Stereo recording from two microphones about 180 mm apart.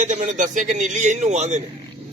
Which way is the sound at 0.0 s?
45° right (ahead or behind).